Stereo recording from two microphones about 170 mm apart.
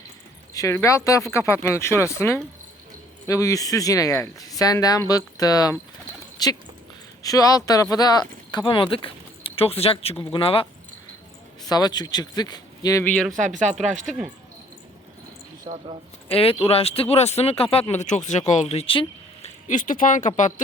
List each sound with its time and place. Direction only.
0.5 s speech: 20° left (ahead or behind)
11.7 s speech: 25° left (ahead or behind)
13.1 s speech: centre (ahead or behind)
13.4 s speech: 45° right (ahead or behind)
14.1 s speech: centre (ahead or behind)
15.7 s speech: 30° right (ahead or behind)
16.3 s speech: 35° left (ahead or behind)
19.6 s speech: 50° left (ahead or behind)